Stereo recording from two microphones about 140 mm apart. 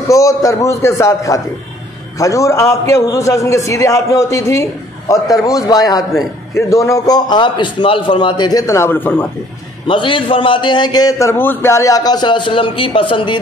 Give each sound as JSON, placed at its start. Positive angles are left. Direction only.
{"t": 0.1, "sound": "a man's voice", "side_deg": 25}
{"t": 9.8, "sound": "a man's voice", "side_deg": 35}